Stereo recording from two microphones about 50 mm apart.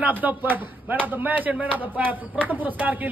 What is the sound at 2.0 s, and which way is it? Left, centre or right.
Speech, right.